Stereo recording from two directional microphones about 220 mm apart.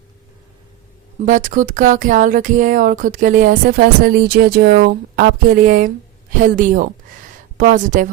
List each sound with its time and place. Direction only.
1.2 s speech: 35° right (ahead or behind)